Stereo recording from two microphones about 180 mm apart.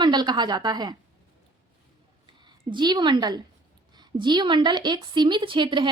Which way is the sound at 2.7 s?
25° right (ahead or behind).